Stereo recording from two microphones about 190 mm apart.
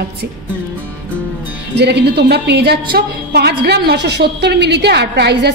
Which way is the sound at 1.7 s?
60° right (ahead or behind).